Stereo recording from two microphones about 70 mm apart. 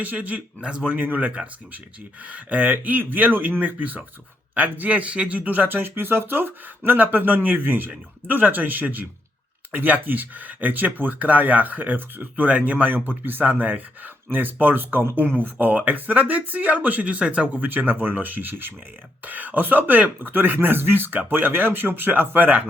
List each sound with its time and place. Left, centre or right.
0.0 s speech: right